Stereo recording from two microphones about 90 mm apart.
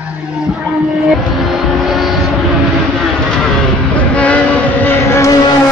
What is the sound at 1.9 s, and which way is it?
Vehicle, centre (ahead or behind).